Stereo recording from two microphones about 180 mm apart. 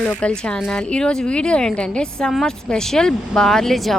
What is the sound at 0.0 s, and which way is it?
A woman's voice, 5° left (ahead or behind).